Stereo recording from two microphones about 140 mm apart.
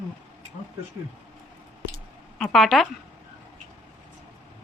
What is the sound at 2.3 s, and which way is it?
Speech, 5° left (ahead or behind).